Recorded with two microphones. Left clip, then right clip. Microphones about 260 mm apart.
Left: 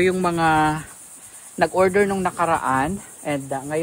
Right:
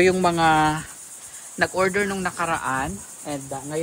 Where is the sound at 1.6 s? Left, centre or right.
Centre.